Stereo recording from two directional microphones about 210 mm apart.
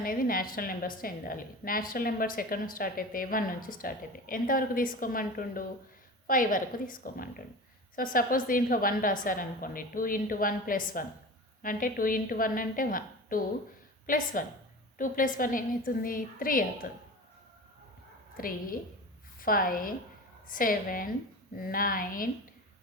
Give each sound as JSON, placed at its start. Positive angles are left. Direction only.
{"t": 0.0, "sound": "a woman's voice", "side_deg": 45}
{"t": 18.3, "sound": "a woman's voice", "side_deg": 40}